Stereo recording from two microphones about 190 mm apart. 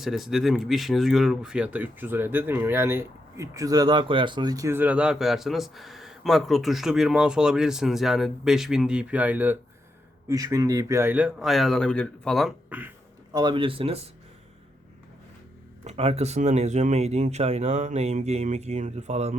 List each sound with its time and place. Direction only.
0.0 s a man's voice: centre (ahead or behind)
13.3 s speech: 25° right (ahead or behind)
15.8 s speech: 35° right (ahead or behind)